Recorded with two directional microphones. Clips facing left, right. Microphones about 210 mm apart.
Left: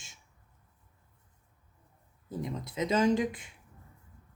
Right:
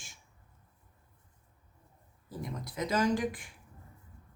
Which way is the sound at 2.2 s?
20° left (ahead or behind).